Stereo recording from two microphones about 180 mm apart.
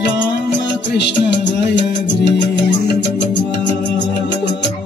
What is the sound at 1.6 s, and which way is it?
Music, 75° left (ahead or behind).